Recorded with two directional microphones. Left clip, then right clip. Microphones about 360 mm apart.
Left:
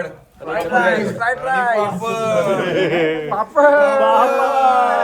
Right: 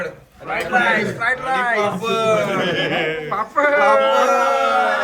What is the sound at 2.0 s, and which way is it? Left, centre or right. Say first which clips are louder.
A man's voice: even; left.